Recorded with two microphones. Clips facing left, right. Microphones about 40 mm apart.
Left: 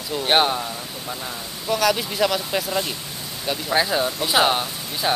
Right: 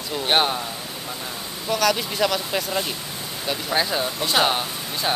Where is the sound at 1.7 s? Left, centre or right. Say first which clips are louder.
Left 1 dB; centre.